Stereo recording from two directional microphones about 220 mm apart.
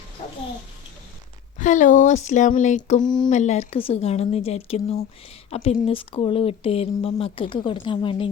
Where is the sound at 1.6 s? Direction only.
35° left (ahead or behind).